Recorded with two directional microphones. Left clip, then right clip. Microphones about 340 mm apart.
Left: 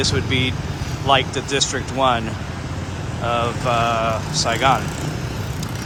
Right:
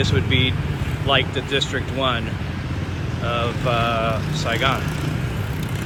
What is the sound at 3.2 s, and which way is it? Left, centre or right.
Speech, centre.